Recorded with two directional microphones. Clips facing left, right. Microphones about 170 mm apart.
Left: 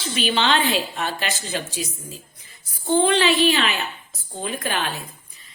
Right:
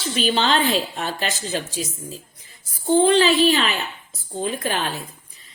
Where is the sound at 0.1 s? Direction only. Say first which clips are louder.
Right 1 dB; 40° right (ahead or behind).